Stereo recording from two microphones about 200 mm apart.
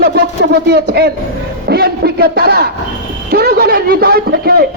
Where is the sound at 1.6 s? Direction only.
55° right (ahead or behind).